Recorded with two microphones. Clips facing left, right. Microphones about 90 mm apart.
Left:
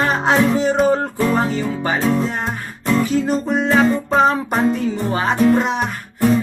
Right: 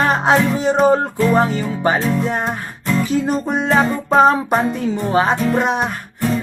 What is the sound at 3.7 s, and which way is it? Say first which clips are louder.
Music: left 1 dB; 20° right (ahead or behind).